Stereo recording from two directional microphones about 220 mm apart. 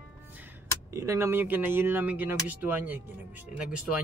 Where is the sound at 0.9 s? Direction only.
15° right (ahead or behind).